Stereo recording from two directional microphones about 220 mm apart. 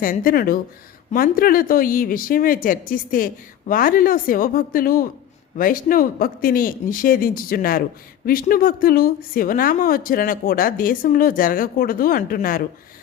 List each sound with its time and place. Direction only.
0.0 s speech: 40° left (ahead or behind)